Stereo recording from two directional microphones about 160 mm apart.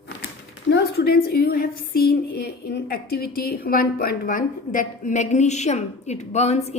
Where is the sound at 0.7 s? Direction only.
85° left.